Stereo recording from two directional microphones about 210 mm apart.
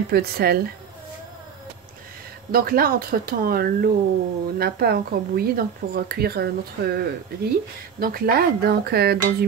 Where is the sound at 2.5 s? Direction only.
45° right (ahead or behind).